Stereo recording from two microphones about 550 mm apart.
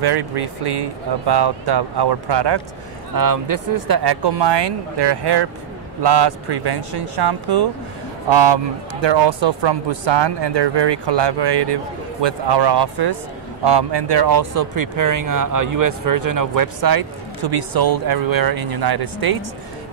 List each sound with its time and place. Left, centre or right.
0.0 s speech: right
3.2 s speech: right
9.0 s speech: right